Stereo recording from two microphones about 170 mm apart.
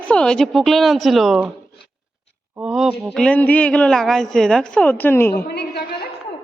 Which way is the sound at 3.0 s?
5° left (ahead or behind).